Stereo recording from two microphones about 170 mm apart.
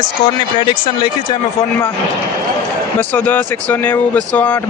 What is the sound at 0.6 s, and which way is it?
Speech, 30° left (ahead or behind).